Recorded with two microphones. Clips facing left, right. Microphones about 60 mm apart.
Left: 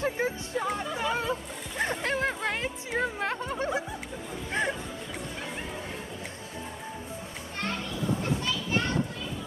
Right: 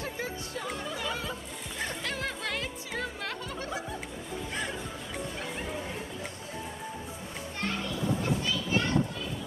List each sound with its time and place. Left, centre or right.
0.0 s music: left